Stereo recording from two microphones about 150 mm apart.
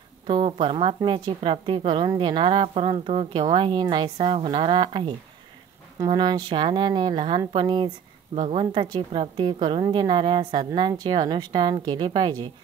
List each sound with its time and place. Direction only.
0.3 s a woman's voice: 35° right (ahead or behind)